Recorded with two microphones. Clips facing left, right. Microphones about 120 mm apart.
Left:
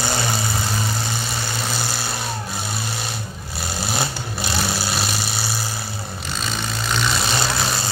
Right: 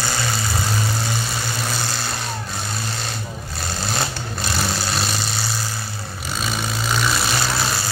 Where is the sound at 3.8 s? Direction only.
10° left (ahead or behind).